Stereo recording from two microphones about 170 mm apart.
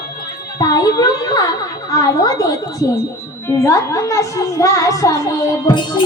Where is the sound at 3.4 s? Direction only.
15° left (ahead or behind).